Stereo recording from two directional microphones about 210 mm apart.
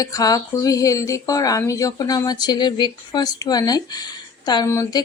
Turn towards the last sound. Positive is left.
turn(degrees=15)  # may be behind; listen again after turning